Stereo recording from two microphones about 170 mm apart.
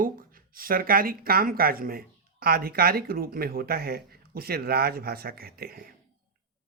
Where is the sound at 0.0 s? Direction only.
60° right (ahead or behind).